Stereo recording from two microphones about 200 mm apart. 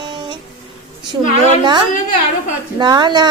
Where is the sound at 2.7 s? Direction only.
20° right (ahead or behind).